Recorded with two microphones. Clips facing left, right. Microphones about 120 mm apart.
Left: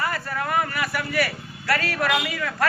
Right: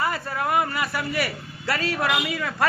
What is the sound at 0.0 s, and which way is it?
Speech, 20° right (ahead or behind).